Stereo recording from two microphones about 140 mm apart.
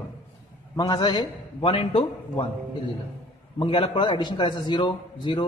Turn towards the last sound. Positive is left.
turn(degrees=35)  # may be behind; listen again after turning